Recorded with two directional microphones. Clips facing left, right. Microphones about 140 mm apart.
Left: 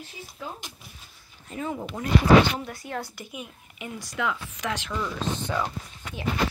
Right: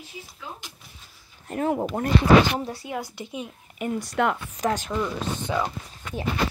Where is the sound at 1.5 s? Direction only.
60° right (ahead or behind).